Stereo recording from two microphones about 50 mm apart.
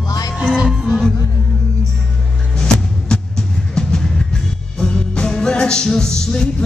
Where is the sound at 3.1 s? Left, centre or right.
Centre.